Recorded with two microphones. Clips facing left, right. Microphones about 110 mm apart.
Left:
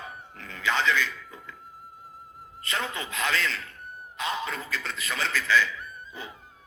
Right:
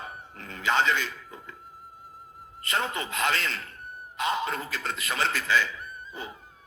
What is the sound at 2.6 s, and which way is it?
A man's voice, 45° right (ahead or behind).